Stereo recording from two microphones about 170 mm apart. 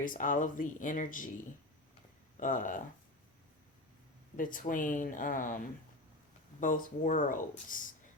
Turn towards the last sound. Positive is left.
turn(degrees=50)  # may be behind; listen again after turning